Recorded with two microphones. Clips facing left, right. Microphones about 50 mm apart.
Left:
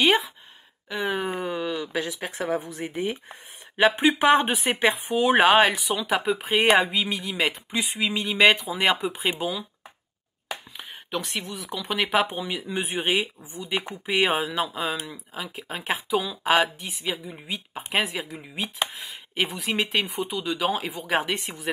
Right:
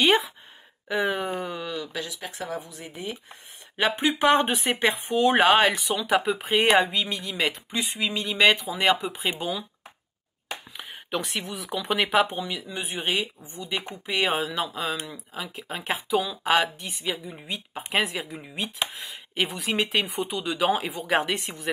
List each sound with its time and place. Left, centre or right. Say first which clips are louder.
0.0 s speech: even; centre; by 2.9 s left
4.2 s speech: right 1 dB; centre
10.8 s speech: right 2 dB; centre
12.4 s speech: left 3 dB; centre